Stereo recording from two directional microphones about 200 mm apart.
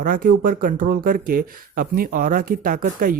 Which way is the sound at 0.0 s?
45° right (ahead or behind).